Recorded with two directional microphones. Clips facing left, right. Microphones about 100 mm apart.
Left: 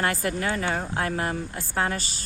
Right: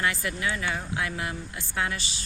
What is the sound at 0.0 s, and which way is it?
Speech, 45° left (ahead or behind).